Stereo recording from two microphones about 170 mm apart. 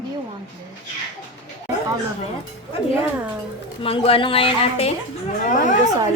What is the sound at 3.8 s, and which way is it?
A woman's voice, 30° left (ahead or behind).